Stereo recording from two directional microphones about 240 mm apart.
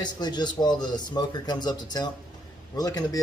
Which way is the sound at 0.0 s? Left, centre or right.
Centre.